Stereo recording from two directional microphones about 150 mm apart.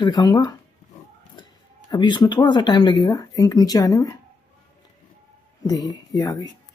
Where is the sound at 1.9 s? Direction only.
30° left (ahead or behind).